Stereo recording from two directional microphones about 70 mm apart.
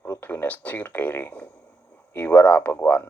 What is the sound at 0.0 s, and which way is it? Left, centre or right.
Speech, left.